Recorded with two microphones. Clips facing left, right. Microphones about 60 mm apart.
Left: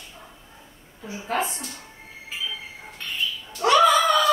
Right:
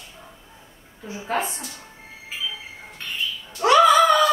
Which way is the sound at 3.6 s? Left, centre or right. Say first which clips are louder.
Right 2 dB; centre.